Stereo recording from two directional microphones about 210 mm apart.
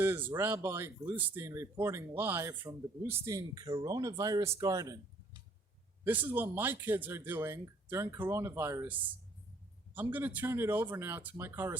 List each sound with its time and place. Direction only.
0.0 s speech: 10° right (ahead or behind)